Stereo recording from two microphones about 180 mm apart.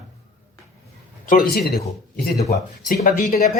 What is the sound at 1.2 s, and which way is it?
Speech, 50° left (ahead or behind).